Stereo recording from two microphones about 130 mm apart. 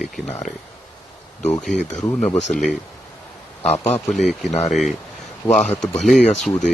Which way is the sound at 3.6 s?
55° left (ahead or behind).